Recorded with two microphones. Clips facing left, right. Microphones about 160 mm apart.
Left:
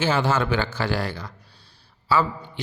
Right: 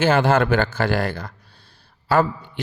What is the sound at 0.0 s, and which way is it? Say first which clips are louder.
Speech: right 5 dB; 55° right (ahead or behind).